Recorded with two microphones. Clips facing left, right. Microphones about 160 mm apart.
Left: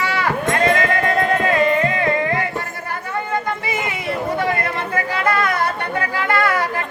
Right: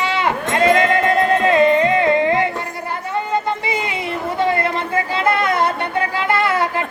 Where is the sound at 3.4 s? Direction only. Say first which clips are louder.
Right 2 dB; 25° right (ahead or behind).